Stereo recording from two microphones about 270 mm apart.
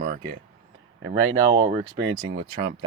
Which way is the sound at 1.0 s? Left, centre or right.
Centre.